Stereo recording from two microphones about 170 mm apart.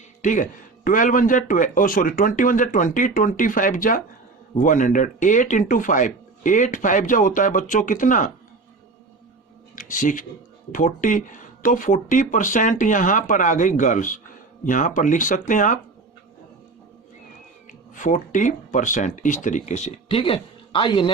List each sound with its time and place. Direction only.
0.2 s a man's voice: 50° left (ahead or behind)
9.7 s speech: 50° left (ahead or behind)
17.7 s speech: 50° left (ahead or behind); by 21.1 s 30° left (ahead or behind)